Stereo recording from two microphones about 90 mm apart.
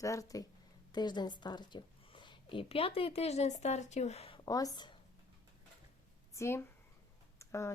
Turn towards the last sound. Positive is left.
turn(degrees=35)  # may be behind; listen again after turning